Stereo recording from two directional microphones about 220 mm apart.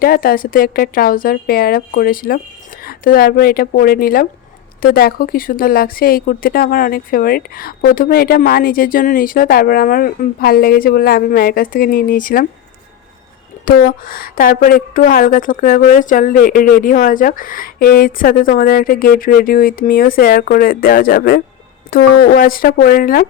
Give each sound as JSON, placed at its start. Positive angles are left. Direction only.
{"t": 0.0, "sound": "a woman's voice", "side_deg": 40}
{"t": 13.7, "sound": "a woman's voice", "side_deg": 40}